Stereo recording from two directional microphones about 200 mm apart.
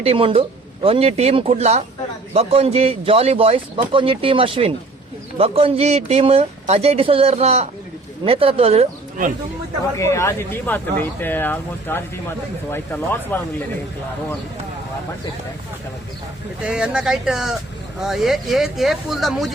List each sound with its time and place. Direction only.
0.0 s speech: 30° right (ahead or behind)
10.0 s speech: 15° left (ahead or behind)
16.6 s speech: 5° right (ahead or behind)